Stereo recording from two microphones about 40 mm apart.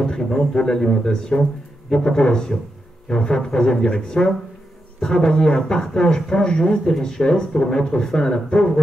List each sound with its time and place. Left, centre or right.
0.0 s speech: centre